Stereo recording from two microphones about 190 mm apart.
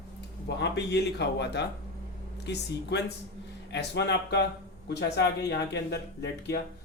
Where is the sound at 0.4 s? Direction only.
60° left (ahead or behind).